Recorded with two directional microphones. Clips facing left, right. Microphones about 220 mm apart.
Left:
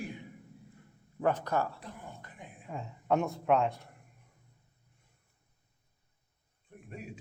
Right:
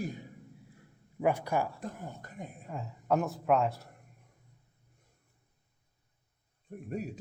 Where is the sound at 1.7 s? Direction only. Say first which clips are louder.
Right 5 dB; 45° right (ahead or behind).